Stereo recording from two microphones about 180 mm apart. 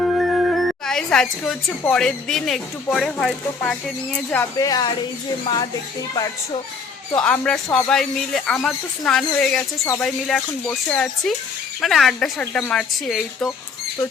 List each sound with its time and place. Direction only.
0.0 s speech: centre (ahead or behind)
4.5 s speech: 20° left (ahead or behind)
7.2 s speech: 5° left (ahead or behind)
9.7 s speech: 15° left (ahead or behind)
10.0 s speech: centre (ahead or behind)